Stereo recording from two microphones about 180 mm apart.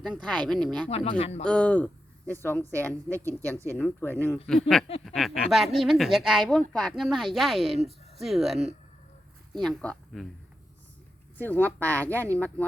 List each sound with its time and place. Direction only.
0.0 s speech: 5° left (ahead or behind)
0.9 s speech: 35° left (ahead or behind)
1.5 s speech: 5° left (ahead or behind)
5.0 s a woman's voice: centre (ahead or behind)
11.3 s speech: 10° left (ahead or behind)